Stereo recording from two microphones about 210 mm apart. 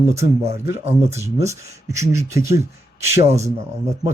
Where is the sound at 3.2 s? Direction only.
30° right (ahead or behind).